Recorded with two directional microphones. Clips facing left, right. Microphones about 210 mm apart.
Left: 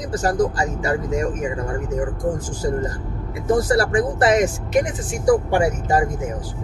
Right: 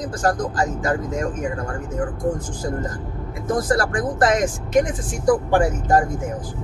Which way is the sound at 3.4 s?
10° left (ahead or behind).